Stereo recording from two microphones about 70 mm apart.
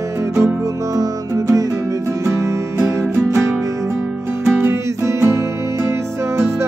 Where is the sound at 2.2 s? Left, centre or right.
Right.